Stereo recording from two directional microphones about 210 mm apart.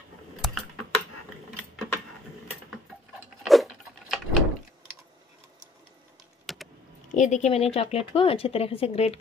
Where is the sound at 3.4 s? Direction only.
Centre (ahead or behind).